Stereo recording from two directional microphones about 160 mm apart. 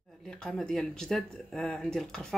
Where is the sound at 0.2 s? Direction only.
5° left (ahead or behind).